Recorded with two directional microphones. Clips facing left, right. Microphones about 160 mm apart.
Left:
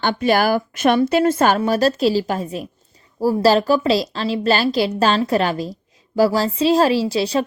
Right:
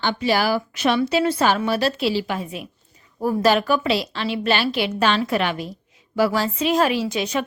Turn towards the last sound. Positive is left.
turn(degrees=35)  # may be behind; listen again after turning